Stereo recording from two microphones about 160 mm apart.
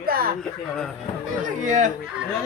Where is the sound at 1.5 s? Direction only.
50° right (ahead or behind).